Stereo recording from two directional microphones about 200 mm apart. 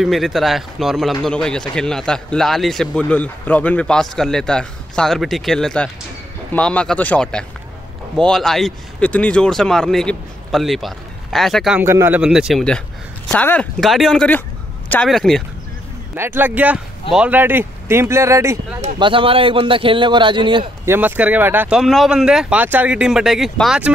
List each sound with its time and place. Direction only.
0.0 s speech: centre (ahead or behind)
11.8 s speech: 10° right (ahead or behind)
16.2 s speech: 10° right (ahead or behind)
18.8 s speech: 25° right (ahead or behind)
20.8 s speech: 10° right (ahead or behind)